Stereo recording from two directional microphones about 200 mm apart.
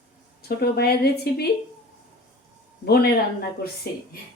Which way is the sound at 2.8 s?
50° left (ahead or behind).